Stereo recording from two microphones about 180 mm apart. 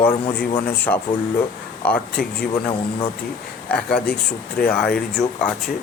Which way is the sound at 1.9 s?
55° left (ahead or behind).